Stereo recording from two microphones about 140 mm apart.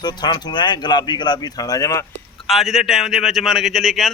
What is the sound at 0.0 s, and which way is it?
Speech, 30° left (ahead or behind).